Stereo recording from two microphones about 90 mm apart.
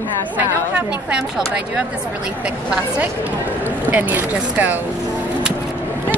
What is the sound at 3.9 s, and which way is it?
Speech, 20° right (ahead or behind).